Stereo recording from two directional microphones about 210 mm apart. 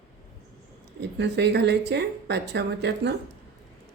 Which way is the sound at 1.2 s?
55° right (ahead or behind).